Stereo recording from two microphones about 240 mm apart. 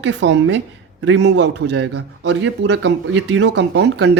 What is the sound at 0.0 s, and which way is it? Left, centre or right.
Speech, right.